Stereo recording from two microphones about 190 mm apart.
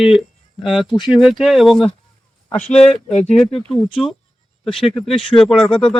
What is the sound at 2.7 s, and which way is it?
Speech, 35° left (ahead or behind).